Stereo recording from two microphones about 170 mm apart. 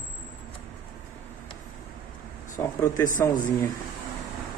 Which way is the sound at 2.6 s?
15° left (ahead or behind).